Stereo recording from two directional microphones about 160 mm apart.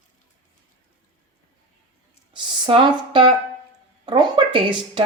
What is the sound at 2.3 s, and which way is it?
Speech, 30° right (ahead or behind).